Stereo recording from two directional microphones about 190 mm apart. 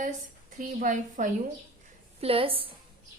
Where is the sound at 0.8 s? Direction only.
45° right (ahead or behind).